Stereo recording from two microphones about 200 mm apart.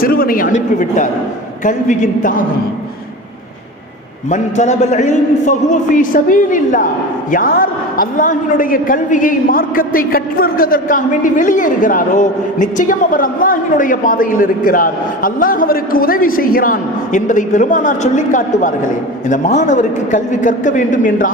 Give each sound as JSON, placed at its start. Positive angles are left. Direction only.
{"t": 0.0, "sound": "a man's voice", "side_deg": 45}
{"t": 4.3, "sound": "a man's voice", "side_deg": 35}